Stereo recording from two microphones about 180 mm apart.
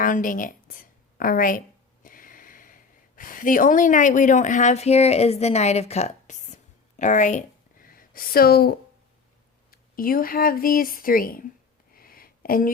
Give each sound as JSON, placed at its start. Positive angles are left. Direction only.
{"t": 0.0, "sound": "speech", "side_deg": 50}
{"t": 9.7, "sound": "speech", "side_deg": 55}
{"t": 11.9, "sound": "a sound", "side_deg": 55}